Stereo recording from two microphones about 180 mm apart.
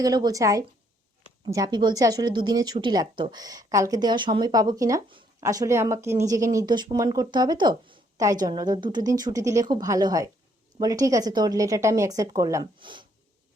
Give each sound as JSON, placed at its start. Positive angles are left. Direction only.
{"t": 0.0, "sound": "speech", "side_deg": -20}